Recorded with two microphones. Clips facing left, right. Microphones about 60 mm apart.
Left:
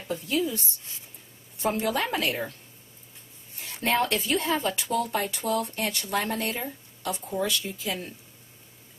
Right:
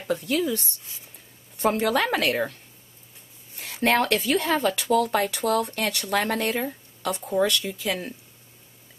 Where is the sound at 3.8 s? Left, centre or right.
Right.